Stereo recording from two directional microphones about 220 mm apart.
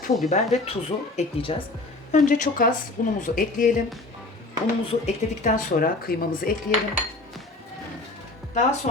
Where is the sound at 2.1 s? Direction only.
35° left (ahead or behind).